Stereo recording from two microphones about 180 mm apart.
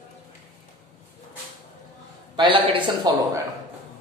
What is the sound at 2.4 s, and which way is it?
A man's voice, 25° right (ahead or behind).